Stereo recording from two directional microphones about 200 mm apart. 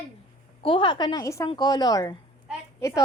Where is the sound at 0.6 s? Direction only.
25° left (ahead or behind).